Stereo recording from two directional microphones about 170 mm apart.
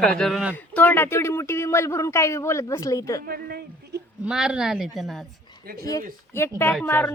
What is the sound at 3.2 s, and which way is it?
Speech, 65° right (ahead or behind).